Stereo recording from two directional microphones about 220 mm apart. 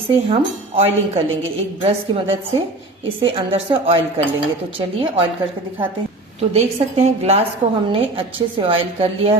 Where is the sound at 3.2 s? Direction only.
25° right (ahead or behind).